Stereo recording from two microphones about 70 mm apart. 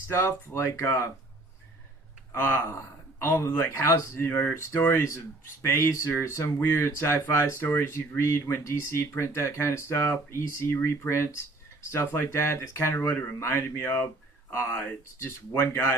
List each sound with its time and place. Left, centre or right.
0.1 s speech: left
2.3 s speech: left
4.5 s speech: left
10.8 s speech: left
11.9 s speech: left